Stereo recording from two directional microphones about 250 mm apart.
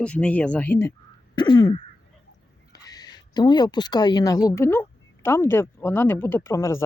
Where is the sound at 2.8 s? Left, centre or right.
Centre.